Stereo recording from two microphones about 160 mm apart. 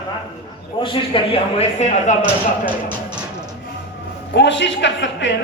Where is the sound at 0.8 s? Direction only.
35° left (ahead or behind).